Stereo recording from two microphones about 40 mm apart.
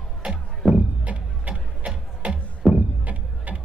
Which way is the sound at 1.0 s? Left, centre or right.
Right.